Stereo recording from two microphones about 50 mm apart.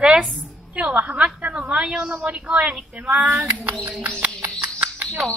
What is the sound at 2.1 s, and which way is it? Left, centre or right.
Speech, right.